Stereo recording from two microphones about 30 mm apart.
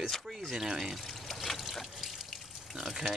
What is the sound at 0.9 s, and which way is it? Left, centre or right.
Pour, centre.